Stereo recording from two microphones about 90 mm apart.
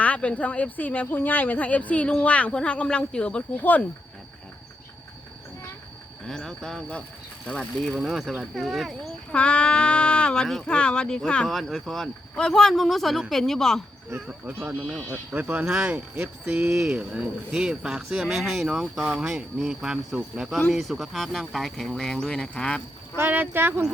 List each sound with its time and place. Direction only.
0.0 s speech: 15° left (ahead or behind)
6.2 s speech: 5° left (ahead or behind)
7.9 s speech: 5° right (ahead or behind)
9.3 s speech: 10° left (ahead or behind)
14.3 s speech: 15° right (ahead or behind); by 22.8 s 5° left (ahead or behind)
23.1 s speech: 20° right (ahead or behind)